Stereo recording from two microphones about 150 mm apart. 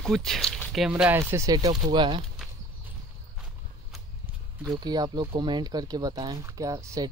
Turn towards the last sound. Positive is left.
turn(degrees=-20)  # may be behind; listen again after turning